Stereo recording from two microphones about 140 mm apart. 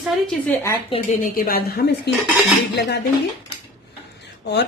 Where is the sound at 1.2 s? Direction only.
85° left.